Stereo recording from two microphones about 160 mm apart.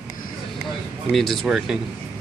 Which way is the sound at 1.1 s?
Centre (ahead or behind).